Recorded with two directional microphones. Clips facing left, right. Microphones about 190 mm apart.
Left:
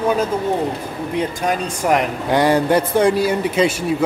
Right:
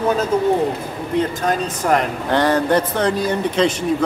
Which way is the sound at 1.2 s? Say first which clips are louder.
Right 2 dB; 10° left (ahead or behind).